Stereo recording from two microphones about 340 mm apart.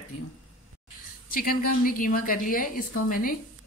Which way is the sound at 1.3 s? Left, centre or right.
Left.